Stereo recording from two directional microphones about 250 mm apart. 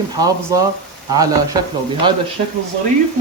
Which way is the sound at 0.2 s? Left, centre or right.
Centre.